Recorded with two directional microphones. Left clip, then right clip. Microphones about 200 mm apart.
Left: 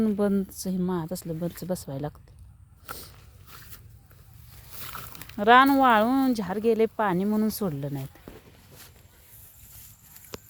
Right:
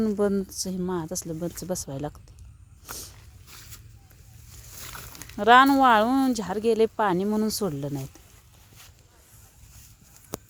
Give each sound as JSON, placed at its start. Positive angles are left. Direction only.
{"t": 0.0, "sound": "speech", "side_deg": 0}
{"t": 3.4, "sound": "a sound", "side_deg": -20}
{"t": 4.7, "sound": "speech", "side_deg": 0}